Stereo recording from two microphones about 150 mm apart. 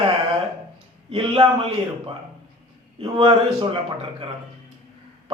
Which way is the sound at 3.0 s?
35° right (ahead or behind).